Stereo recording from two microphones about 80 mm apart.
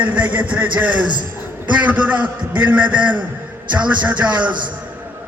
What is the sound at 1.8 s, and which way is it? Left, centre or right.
A man's voice, centre.